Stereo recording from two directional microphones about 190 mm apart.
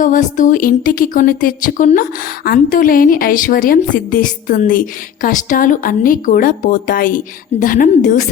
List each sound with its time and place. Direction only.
0.0 s a woman's voice: 40° left (ahead or behind)